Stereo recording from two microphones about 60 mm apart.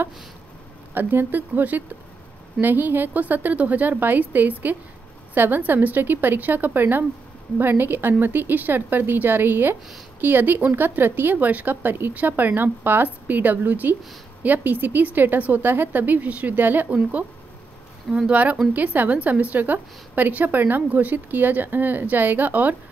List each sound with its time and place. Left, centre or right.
0.9 s a woman's voice: right
18.3 s a woman's voice: right